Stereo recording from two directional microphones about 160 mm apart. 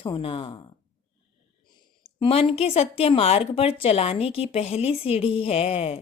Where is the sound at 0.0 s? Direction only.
35° left (ahead or behind).